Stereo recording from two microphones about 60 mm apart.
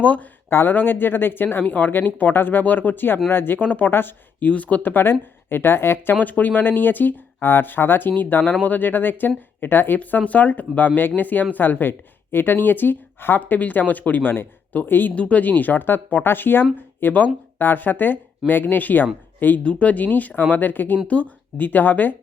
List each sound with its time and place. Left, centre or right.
0.0 s speech: left
6.2 s speech: left